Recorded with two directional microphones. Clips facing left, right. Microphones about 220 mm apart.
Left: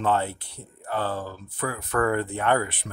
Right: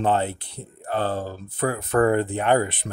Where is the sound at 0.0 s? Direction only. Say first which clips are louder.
Right 2 dB; 20° right (ahead or behind).